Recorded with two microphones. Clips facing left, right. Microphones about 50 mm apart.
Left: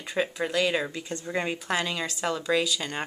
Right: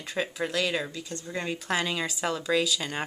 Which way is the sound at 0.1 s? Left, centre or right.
Centre.